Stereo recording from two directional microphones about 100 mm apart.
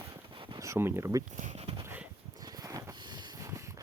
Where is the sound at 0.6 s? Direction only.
25° right (ahead or behind).